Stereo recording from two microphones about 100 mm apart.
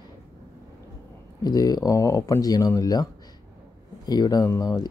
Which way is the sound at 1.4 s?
40° left (ahead or behind).